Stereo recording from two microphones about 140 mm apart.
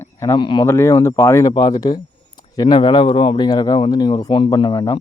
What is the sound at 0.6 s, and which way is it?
Speech, 20° left (ahead or behind).